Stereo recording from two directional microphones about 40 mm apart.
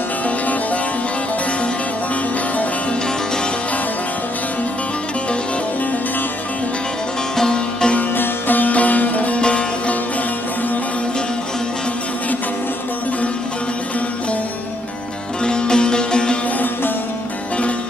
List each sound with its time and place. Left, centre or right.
7.3 s music: centre
8.2 s music: left
9.4 s music: left
15.4 s music: left